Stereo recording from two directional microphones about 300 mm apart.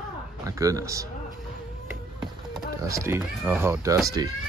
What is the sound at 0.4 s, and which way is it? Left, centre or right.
Speech, centre.